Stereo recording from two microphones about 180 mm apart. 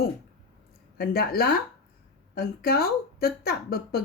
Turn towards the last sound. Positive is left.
turn(degrees=60)  # may be behind; listen again after turning